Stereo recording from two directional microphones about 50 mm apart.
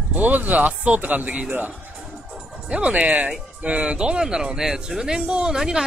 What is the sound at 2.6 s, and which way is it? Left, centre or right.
Speech, right.